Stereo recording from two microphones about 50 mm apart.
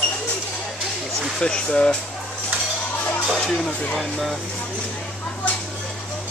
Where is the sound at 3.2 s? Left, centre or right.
Centre.